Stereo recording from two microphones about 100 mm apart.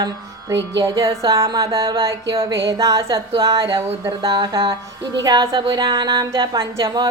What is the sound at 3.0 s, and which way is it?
Speech, 60° right (ahead or behind).